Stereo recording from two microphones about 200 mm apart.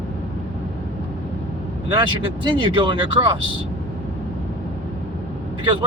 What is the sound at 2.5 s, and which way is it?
Speech, 25° right (ahead or behind).